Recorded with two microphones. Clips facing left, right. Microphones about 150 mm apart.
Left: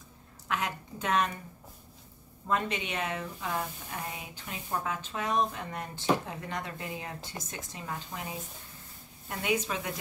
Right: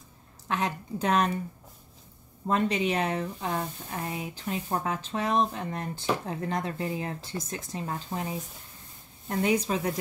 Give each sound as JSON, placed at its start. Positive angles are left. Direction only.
{"t": 0.5, "sound": "speech", "side_deg": -30}
{"t": 2.4, "sound": "speech", "side_deg": -35}
{"t": 9.3, "sound": "speech", "side_deg": -35}